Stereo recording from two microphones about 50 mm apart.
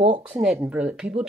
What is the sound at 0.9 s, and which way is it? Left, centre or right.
Speech, centre.